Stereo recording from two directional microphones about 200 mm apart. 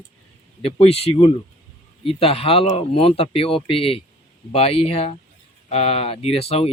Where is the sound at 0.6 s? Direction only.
30° left (ahead or behind).